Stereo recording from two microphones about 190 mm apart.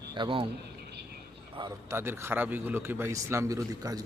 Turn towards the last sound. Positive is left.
turn(degrees=-20)  # may be behind; listen again after turning